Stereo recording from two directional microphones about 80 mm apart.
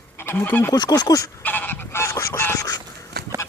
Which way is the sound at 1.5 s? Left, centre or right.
Left.